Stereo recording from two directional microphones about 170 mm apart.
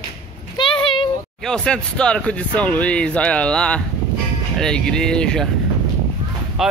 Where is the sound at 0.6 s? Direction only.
30° left (ahead or behind).